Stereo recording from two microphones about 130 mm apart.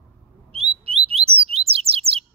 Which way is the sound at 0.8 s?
50° right (ahead or behind).